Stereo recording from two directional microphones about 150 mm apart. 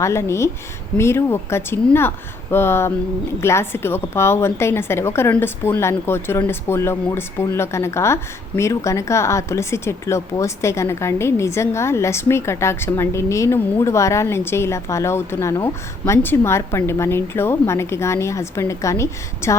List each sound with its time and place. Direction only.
0.0 s a woman's voice: 20° left (ahead or behind)